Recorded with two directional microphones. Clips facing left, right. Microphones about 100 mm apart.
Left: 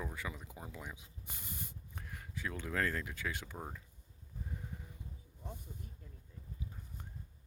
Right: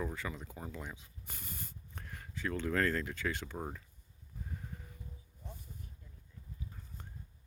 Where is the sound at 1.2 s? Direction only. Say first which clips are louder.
Even; 15° left (ahead or behind).